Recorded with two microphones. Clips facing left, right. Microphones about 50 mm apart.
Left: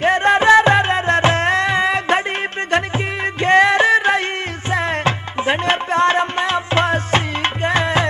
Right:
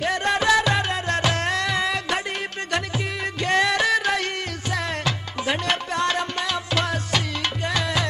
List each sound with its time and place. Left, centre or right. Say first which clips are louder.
0.0 s music: left 8 dB; left
3.3 s music: left 8 dB; left